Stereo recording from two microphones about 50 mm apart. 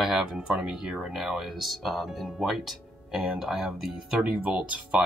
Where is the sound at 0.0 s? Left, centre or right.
Centre.